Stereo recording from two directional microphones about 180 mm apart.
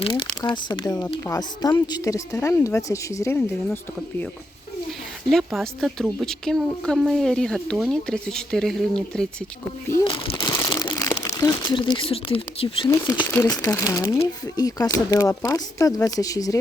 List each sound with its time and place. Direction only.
0.0 s speech: 25° left (ahead or behind)
5.3 s a woman's voice: centre (ahead or behind)
10.0 s speech: 30° left (ahead or behind)
10.5 s crumpling: 20° left (ahead or behind)
11.3 s speech: 20° left (ahead or behind)
12.9 s speech: 15° left (ahead or behind)